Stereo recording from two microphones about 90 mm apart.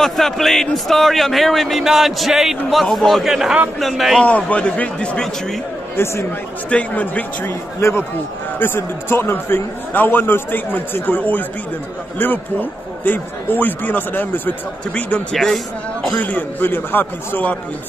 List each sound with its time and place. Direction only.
0.0 s a man's voice: 5° left (ahead or behind)
4.2 s a man's voice: 15° left (ahead or behind)
6.0 s a man's voice: 25° left (ahead or behind)
8.5 s a man's voice: 25° left (ahead or behind)
13.0 s a man's voice: 20° left (ahead or behind)
15.3 s a man's voice: 5° left (ahead or behind)
16.2 s a man's voice: 20° left (ahead or behind)